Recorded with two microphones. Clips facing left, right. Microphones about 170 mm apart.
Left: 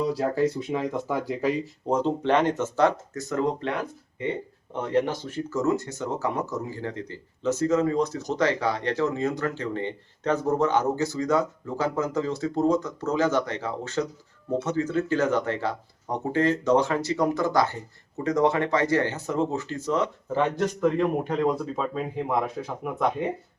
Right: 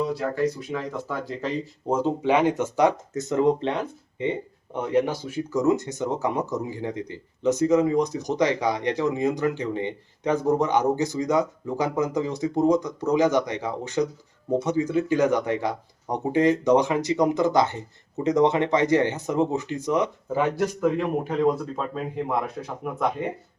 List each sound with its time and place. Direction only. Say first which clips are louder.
0.1 s speech: left 1 dB; 30° left (ahead or behind); by 1.5 s 10° left (ahead or behind)
1.9 s speech: right 1 dB; 5° right (ahead or behind)